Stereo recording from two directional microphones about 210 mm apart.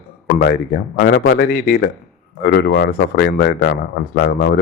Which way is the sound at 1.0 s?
50° left (ahead or behind).